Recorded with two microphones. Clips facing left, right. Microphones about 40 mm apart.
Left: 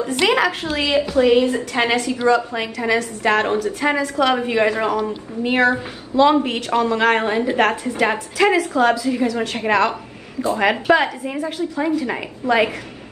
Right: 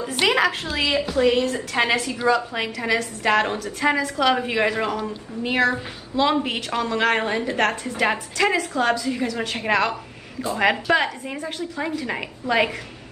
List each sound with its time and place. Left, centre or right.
0.2 s a woman's voice: centre
1.1 s a woman's voice: centre
1.7 s a woman's voice: centre
3.6 s a woman's voice: centre
4.0 s a woman's voice: centre
5.0 s a woman's voice: centre
6.1 s a woman's voice: centre